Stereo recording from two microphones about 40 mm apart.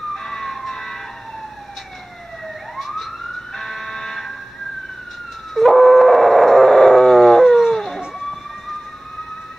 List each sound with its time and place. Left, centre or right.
0.1 s emergency vehicle: centre
2.4 s emergency vehicle: centre
3.5 s fire alarm: centre
5.5 s howl: centre